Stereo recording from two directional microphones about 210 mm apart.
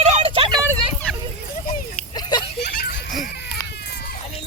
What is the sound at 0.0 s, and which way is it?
Vehicle, 30° right (ahead or behind).